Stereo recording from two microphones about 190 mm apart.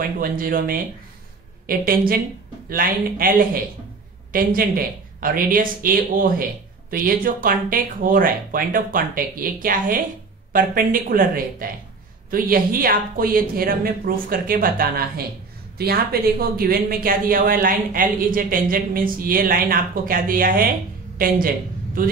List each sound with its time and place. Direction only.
0.0 s a woman's voice: 50° right (ahead or behind)